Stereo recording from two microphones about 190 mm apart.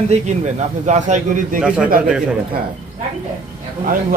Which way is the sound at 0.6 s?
40° right (ahead or behind).